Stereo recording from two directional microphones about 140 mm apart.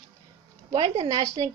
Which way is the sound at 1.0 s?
25° right (ahead or behind).